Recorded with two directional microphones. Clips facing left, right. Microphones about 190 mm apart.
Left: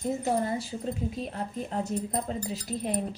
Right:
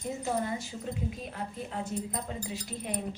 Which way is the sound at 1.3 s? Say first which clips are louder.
Left 4 dB; 40° left (ahead or behind).